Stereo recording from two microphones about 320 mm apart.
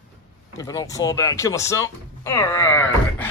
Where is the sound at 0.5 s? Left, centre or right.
Centre.